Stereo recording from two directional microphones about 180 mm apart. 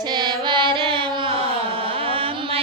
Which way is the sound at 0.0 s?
25° right (ahead or behind).